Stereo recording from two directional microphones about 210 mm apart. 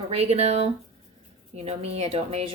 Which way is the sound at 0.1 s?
30° right (ahead or behind).